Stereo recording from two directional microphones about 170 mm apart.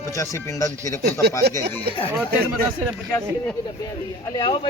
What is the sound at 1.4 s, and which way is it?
Speech, 75° right (ahead or behind).